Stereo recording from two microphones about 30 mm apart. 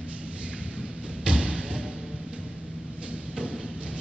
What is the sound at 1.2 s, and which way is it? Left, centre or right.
Thump, right.